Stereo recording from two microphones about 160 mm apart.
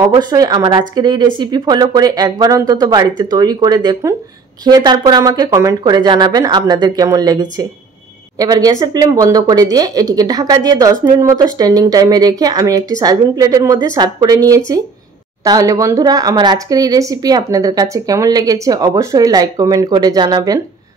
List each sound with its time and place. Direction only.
0.0 s speech: 25° right (ahead or behind)